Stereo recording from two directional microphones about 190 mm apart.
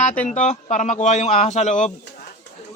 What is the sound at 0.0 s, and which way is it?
Speech, 40° left (ahead or behind).